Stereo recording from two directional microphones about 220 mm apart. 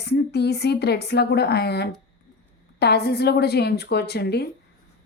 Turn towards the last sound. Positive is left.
turn(degrees=50)  # may be behind; listen again after turning